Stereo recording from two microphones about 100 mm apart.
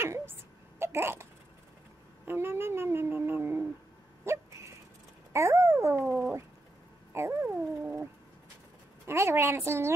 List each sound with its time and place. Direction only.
0.0 s a sound: 25° right (ahead or behind)
2.2 s speech: 25° right (ahead or behind)
5.3 s speech: 25° right (ahead or behind)
7.1 s a sound: 25° right (ahead or behind)
7.4 s pigeon: 20° right (ahead or behind)
9.0 s speech: 25° right (ahead or behind)